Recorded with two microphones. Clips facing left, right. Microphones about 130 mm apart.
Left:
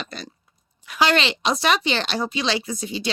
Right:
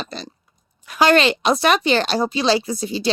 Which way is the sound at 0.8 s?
45° right (ahead or behind).